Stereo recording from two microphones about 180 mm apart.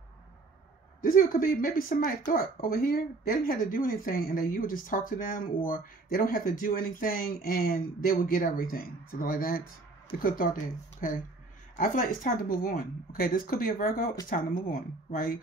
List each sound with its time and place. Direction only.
1.0 s speech: 55° left (ahead or behind)